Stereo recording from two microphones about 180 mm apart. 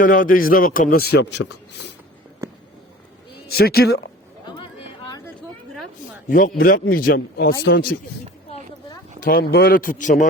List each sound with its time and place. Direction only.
0.0 s a man's voice: 50° left (ahead or behind); by 1.5 s 75° left (ahead or behind)
3.5 s speech: 60° left (ahead or behind)
4.4 s chatter: 25° left (ahead or behind)
6.2 s speech: 45° left (ahead or behind)
9.2 s a man's voice: 60° left (ahead or behind)